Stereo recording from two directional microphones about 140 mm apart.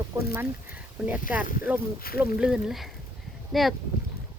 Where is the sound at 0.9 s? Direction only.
10° right (ahead or behind).